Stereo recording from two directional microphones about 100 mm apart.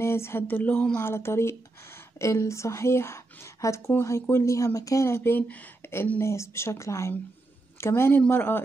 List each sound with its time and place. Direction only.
0.0 s speech: 25° left (ahead or behind)
1.0 s speech: 25° left (ahead or behind)